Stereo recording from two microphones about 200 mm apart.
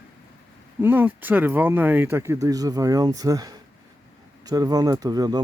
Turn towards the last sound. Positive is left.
turn(degrees=-20)  # may be behind; listen again after turning